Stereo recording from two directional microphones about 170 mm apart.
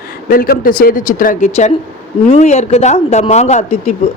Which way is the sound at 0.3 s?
60° left (ahead or behind).